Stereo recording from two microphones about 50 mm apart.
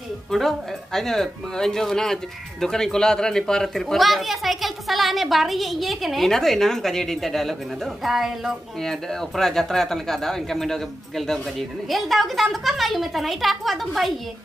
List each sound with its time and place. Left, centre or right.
0.3 s speech: centre
8.8 s speech: centre